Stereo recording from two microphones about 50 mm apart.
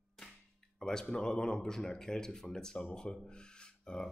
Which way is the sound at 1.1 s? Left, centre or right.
Centre.